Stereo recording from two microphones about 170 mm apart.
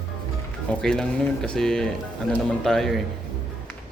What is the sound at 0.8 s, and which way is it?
A man's voice, 5° left (ahead or behind).